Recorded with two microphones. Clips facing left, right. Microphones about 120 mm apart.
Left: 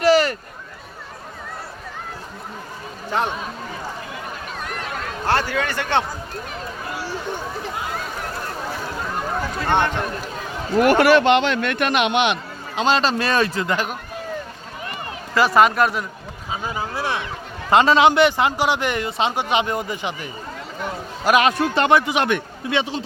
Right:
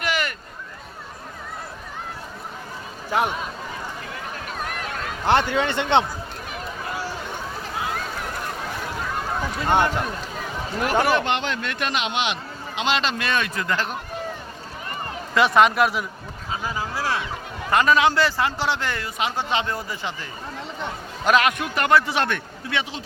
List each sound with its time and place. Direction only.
0.0 s a sound: 35° left (ahead or behind)
3.1 s speech: 5° right (ahead or behind)
5.2 s speech: 20° right (ahead or behind)
9.6 s speech: 10° right (ahead or behind)
10.8 s a man's voice: 75° left (ahead or behind); by 12.4 s 55° left (ahead or behind)
12.7 s a man's voice: 40° left (ahead or behind)
15.4 s speech: centre (ahead or behind)
16.5 s speech: 25° left (ahead or behind)
21.4 s speech: 25° left (ahead or behind)